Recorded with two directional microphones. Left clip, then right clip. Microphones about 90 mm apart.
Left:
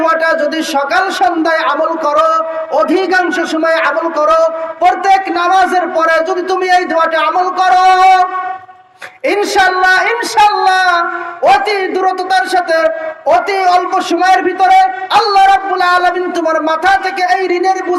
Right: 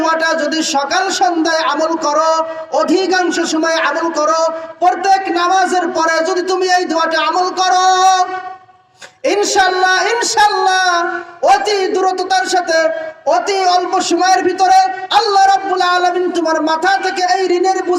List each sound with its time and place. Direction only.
0.0 s speech: 40° right (ahead or behind)
9.2 s speech: 35° right (ahead or behind)